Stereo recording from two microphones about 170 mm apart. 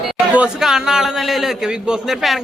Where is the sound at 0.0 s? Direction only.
5° right (ahead or behind).